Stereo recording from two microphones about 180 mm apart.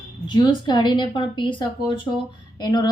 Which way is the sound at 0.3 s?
25° left (ahead or behind).